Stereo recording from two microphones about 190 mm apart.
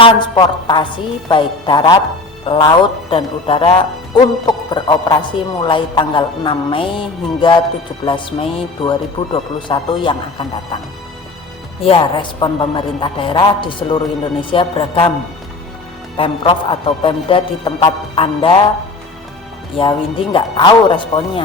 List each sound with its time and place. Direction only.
0.0 s a man's voice: 25° left (ahead or behind)
11.8 s a man's voice: 30° left (ahead or behind)
16.1 s a man's voice: 25° left (ahead or behind)
17.7 s music: 15° left (ahead or behind)
18.2 s a man's voice: 30° left (ahead or behind)
19.7 s a man's voice: 25° left (ahead or behind)